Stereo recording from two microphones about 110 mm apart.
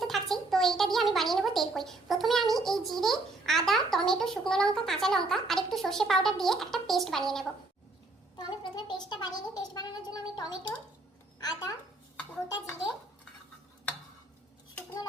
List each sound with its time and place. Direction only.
0.0 s speech: centre (ahead or behind)
8.4 s a woman's voice: 40° left (ahead or behind)